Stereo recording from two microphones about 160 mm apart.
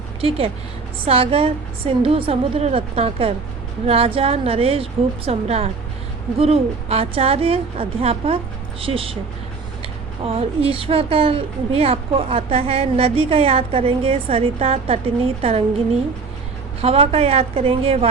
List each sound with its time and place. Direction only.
0.2 s speech: 35° right (ahead or behind)
16.8 s speech: 40° right (ahead or behind)